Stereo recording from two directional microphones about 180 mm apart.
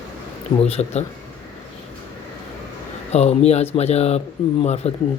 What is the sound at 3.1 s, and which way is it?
Speech, 35° left (ahead or behind).